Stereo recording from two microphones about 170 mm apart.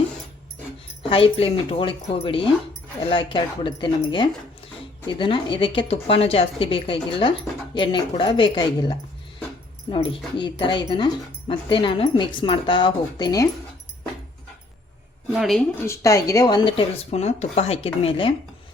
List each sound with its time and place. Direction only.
1.1 s speech: 35° left (ahead or behind)
15.3 s a woman's voice: centre (ahead or behind)
15.8 s speech: 15° left (ahead or behind); by 18.3 s 35° left (ahead or behind)